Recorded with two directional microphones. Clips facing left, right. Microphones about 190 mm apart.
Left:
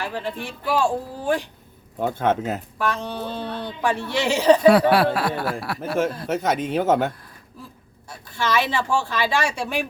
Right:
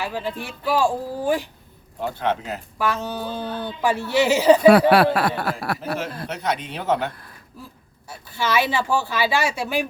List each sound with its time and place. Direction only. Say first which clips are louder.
0.0 s speech: right 1 dB; 5° right (ahead or behind)
2.0 s speech: left 3 dB; 50° left (ahead or behind)
2.7 s speech: right 5 dB; 5° right (ahead or behind)
4.7 s speech: right 2 dB; 65° right (ahead or behind)
6.2 s speech: left 4 dB; 45° left (ahead or behind)
8.3 s speech: right 1 dB; 5° right (ahead or behind)